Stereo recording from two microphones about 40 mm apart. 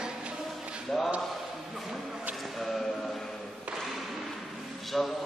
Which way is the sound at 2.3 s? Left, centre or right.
Centre.